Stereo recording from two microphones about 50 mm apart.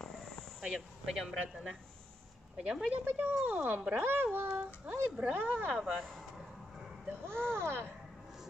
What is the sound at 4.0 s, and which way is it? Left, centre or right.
A woman's voice, right.